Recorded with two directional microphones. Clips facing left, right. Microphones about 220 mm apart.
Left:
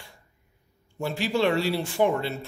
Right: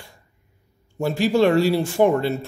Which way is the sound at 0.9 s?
45° right (ahead or behind).